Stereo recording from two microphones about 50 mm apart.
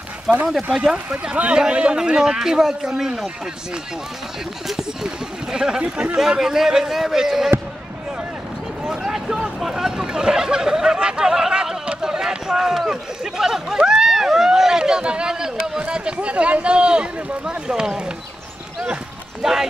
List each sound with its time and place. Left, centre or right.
0.6 s speech: centre
4.6 s speech: centre
8.8 s speech: centre
19.4 s speech: centre